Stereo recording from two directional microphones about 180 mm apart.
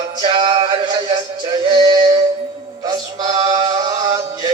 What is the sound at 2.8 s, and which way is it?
Male singing, 20° right (ahead or behind).